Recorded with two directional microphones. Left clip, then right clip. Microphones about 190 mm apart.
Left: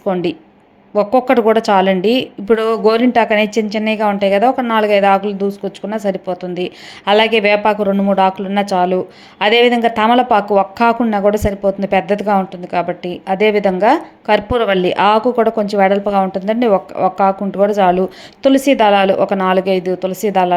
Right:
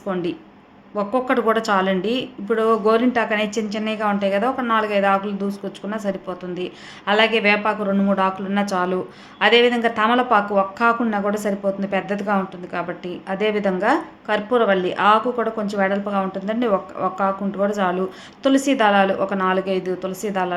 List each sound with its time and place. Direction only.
0.0 s speech: 35° left (ahead or behind)